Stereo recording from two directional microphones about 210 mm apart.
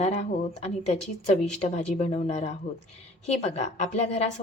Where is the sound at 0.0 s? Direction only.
30° left (ahead or behind).